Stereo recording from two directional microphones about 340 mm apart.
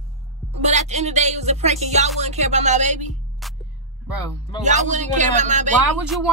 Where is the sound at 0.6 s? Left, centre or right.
Centre.